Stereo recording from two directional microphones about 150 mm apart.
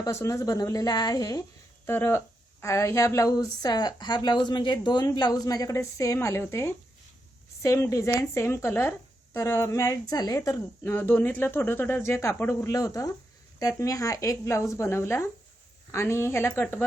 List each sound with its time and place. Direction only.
0.0 s a woman's voice: 20° left (ahead or behind)